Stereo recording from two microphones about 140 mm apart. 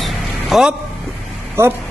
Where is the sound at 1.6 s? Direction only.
15° right (ahead or behind).